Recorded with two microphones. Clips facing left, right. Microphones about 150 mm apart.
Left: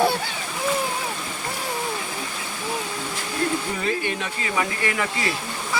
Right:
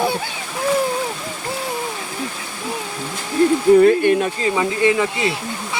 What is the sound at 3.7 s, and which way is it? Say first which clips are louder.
Speech: right 14 dB; 50° right (ahead or behind).